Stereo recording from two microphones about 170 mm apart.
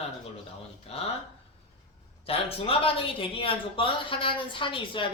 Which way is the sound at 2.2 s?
35° left (ahead or behind).